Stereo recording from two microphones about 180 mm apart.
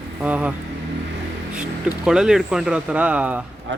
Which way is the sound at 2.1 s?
5° right (ahead or behind).